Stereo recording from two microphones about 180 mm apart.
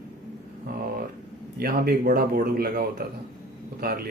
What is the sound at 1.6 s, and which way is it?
Speech, 60° right (ahead or behind).